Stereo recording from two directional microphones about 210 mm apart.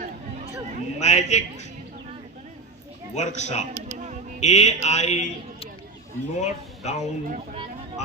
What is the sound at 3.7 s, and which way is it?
Music, 35° right (ahead or behind).